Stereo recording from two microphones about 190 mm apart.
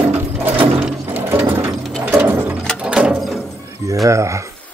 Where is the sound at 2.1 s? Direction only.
10° right (ahead or behind).